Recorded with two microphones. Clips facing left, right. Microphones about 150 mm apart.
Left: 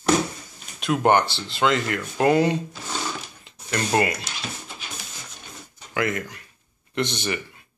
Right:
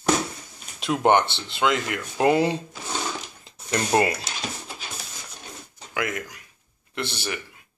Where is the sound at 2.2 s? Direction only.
25° right (ahead or behind).